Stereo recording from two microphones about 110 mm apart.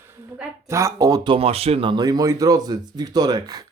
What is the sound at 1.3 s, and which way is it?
Speech, 65° right (ahead or behind).